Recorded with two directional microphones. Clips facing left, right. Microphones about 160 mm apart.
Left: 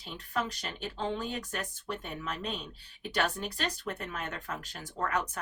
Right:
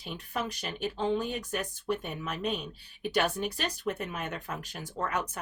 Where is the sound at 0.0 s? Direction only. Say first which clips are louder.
Even; 10° right (ahead or behind).